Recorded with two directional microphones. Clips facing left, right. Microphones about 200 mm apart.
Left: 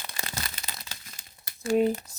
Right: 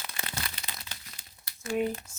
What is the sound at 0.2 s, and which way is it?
Crumpling, 40° left (ahead or behind).